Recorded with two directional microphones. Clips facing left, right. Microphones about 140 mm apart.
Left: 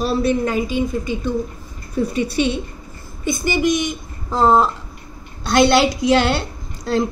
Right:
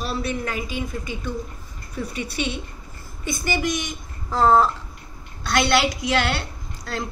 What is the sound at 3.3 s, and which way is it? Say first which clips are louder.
A woman's voice: left 7 dB; 20° left (ahead or behind).